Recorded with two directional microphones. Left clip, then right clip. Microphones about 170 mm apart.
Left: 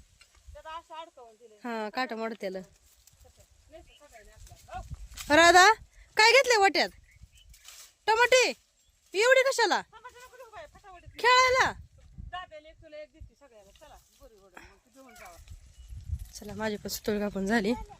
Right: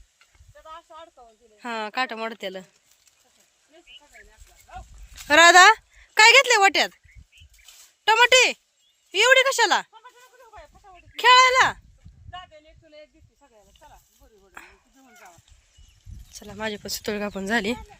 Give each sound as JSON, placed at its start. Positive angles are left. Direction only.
{"t": 0.5, "sound": "snake", "side_deg": 35}
{"t": 1.5, "sound": "speech", "side_deg": 10}
{"t": 5.3, "sound": "speech", "side_deg": 5}
{"t": 7.6, "sound": "a sound", "side_deg": 5}
{"t": 9.1, "sound": "speech", "side_deg": 5}
{"t": 9.9, "sound": "goat", "side_deg": 10}
{"t": 11.2, "sound": "speech", "side_deg": 5}
{"t": 12.3, "sound": "snake", "side_deg": 15}
{"t": 14.5, "sound": "speech", "side_deg": 5}
{"t": 15.1, "sound": "speech", "side_deg": 20}
{"t": 16.3, "sound": "speech", "side_deg": 10}